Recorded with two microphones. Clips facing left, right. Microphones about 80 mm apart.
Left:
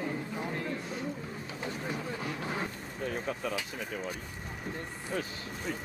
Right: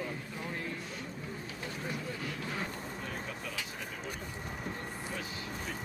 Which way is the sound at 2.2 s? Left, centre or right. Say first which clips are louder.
Left 3 dB; left.